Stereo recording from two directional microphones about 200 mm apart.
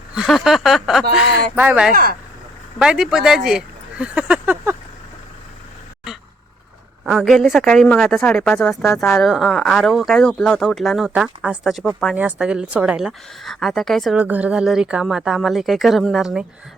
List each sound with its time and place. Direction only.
0.1 s speech: centre (ahead or behind)
1.9 s speech: 45° right (ahead or behind)
2.7 s speech: 5° right (ahead or behind)
7.0 s speech: 5° right (ahead or behind)